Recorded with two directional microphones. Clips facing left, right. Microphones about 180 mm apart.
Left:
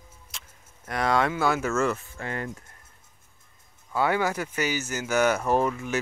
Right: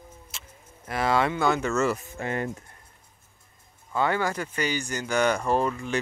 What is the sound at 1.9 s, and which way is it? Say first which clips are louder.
Speech: right 3 dB; 20° right (ahead or behind).